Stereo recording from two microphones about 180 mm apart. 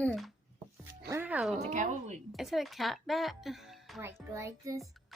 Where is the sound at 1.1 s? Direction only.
10° right (ahead or behind).